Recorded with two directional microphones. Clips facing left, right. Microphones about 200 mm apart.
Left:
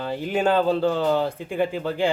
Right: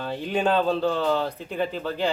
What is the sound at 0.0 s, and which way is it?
Speech, 5° left (ahead or behind).